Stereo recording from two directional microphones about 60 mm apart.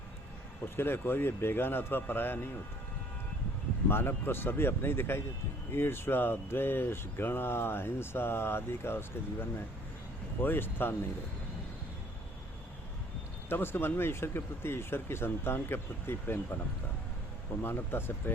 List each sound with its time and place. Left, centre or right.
0.8 s speech: left
3.8 s speech: left
13.5 s speech: left
17.6 s speech: left